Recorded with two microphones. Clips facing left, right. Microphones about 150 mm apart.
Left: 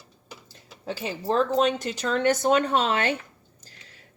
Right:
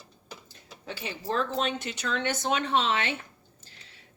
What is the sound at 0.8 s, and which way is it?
Speech, 35° left (ahead or behind).